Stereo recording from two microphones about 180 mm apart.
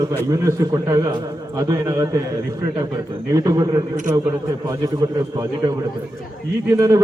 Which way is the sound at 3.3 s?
20° right (ahead or behind).